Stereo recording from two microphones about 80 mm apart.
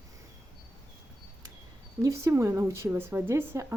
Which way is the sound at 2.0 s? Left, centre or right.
Right.